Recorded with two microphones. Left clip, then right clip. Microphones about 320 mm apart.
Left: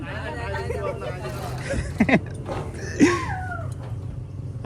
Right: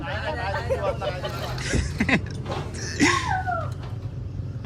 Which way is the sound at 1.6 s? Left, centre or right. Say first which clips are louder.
Left 3 dB; centre.